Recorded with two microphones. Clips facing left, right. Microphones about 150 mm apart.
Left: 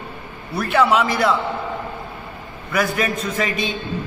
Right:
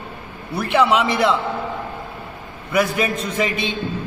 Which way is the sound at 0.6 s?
20° right (ahead or behind).